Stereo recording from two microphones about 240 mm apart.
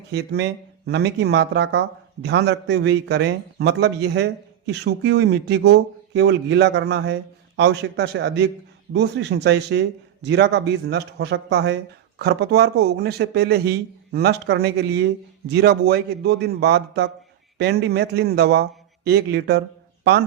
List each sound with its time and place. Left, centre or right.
0.1 s a man's voice: right